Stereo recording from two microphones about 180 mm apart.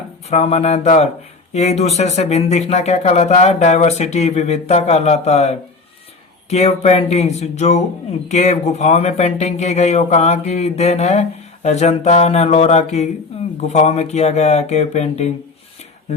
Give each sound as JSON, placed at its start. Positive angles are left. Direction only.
{"t": 0.3, "sound": "speech", "side_deg": 35}